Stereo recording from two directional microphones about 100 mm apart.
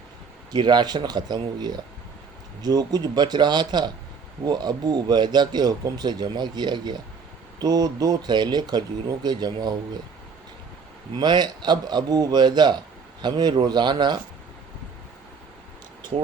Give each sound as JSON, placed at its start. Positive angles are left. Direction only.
{"t": 0.5, "sound": "speech", "side_deg": -45}
{"t": 11.2, "sound": "speech", "side_deg": -45}